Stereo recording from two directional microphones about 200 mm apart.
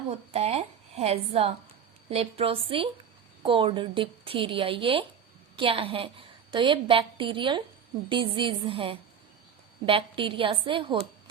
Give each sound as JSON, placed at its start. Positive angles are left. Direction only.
{"t": 0.1, "sound": "a woman's voice", "side_deg": -30}